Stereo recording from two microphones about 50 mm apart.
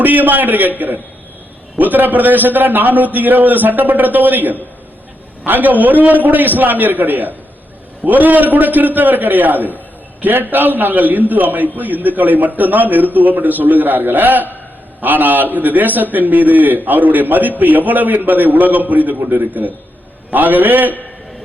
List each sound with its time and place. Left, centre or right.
0.0 s a man's voice: right
1.8 s a man's voice: right